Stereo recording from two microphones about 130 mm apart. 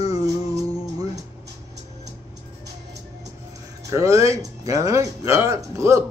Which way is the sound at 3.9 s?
25° right (ahead or behind).